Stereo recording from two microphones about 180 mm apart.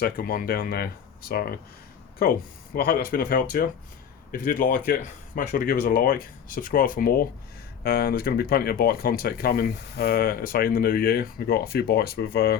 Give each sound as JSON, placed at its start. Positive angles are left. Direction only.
{"t": 0.0, "sound": "speech", "side_deg": 50}